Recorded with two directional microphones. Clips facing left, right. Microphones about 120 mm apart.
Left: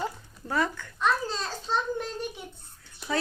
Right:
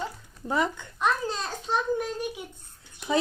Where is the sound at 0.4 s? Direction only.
20° right (ahead or behind).